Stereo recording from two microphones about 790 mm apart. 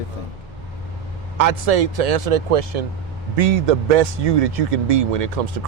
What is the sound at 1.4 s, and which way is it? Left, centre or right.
A man's voice, right.